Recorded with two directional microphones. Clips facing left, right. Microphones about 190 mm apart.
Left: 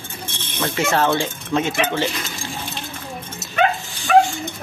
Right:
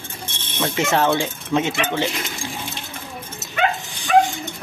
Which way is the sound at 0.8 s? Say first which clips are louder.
Even; 20° right (ahead or behind).